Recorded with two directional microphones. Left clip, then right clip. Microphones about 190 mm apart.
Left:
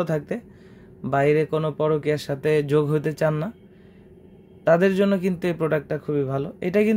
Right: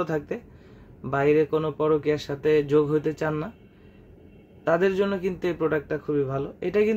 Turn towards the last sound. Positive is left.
turn(degrees=45)  # may be behind; listen again after turning